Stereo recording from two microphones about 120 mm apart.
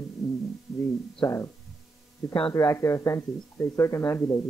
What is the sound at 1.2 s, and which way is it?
Speech, 25° left (ahead or behind).